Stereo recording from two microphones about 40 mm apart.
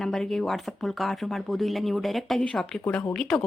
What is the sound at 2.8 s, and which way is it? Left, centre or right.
Speech, left.